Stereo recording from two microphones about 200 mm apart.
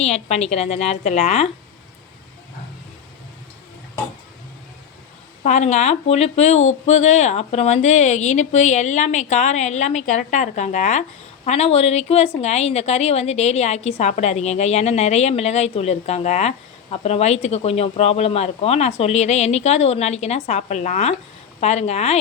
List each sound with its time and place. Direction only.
0.0 s a woman's voice: 30° left (ahead or behind)
5.4 s a woman's voice: 35° left (ahead or behind)